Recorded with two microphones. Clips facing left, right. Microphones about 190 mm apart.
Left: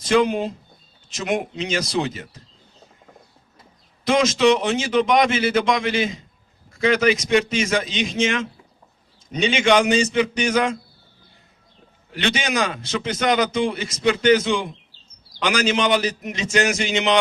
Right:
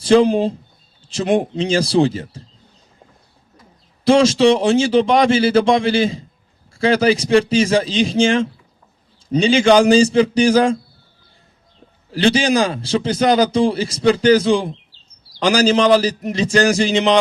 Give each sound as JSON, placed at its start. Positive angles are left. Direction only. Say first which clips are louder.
{"t": 0.0, "sound": "a man's voice", "louder": "right 6 dB", "side_deg": -30}
{"t": 4.0, "sound": "a man's voice", "louder": "right 5 dB", "side_deg": -30}
{"t": 12.1, "sound": "a man's voice", "louder": "right 8 dB", "side_deg": -30}